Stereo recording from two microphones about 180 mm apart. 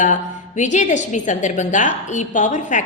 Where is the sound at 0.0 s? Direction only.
45° left (ahead or behind).